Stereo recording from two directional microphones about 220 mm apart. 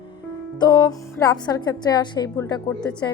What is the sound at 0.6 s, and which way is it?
A woman's voice, 20° left (ahead or behind).